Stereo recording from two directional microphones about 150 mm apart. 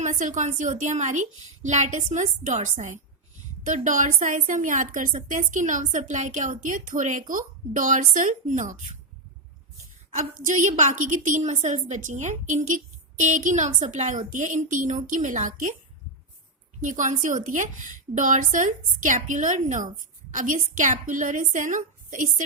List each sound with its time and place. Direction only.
0.0 s a woman's voice: 55° right (ahead or behind)
10.2 s a woman's voice: 60° right (ahead or behind)
16.8 s a woman's voice: 55° right (ahead or behind)